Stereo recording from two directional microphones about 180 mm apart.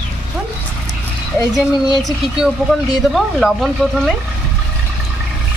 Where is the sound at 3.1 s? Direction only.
Centre (ahead or behind).